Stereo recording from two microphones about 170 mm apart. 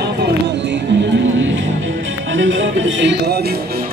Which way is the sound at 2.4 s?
90° right.